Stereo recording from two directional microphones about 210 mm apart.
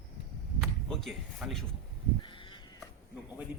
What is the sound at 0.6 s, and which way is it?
Speech, centre (ahead or behind).